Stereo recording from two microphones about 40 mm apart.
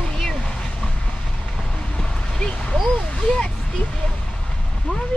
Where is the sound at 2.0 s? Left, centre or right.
Centre.